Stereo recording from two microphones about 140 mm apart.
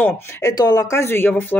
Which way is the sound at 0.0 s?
20° left (ahead or behind).